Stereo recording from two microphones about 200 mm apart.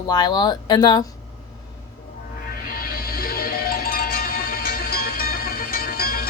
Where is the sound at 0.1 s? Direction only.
20° left (ahead or behind).